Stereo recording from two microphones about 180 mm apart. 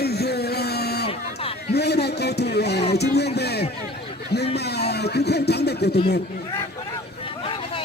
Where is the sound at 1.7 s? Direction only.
65° left (ahead or behind).